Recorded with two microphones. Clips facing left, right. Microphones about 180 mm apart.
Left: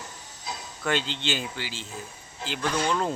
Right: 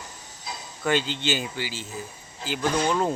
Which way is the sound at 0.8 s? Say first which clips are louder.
Right 3 dB; 5° right (ahead or behind).